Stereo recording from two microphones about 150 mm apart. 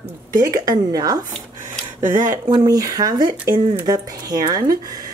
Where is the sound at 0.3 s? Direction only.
25° right (ahead or behind).